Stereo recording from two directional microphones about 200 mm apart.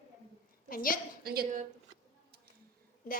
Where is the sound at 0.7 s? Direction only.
45° left (ahead or behind).